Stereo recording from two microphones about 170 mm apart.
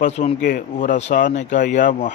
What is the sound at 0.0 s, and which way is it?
Speech, 40° left (ahead or behind).